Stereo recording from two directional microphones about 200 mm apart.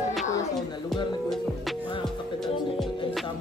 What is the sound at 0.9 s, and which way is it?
Music, centre (ahead or behind).